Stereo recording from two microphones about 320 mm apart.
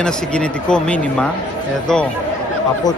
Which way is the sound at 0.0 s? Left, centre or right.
Centre.